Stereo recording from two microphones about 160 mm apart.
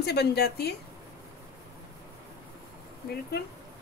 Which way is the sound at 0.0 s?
90° left.